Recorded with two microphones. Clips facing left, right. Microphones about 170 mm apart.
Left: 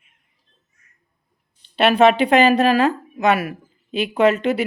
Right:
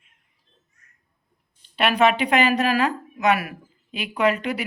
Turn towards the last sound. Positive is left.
turn(degrees=25)  # may be behind; listen again after turning